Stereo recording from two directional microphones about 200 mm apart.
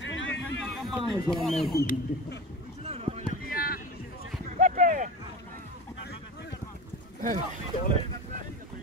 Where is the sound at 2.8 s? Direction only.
30° right (ahead or behind).